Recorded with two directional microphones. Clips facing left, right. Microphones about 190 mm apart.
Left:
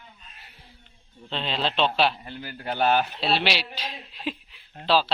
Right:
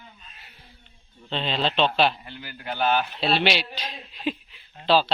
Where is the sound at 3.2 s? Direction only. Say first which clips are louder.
Right 2 dB; centre (ahead or behind).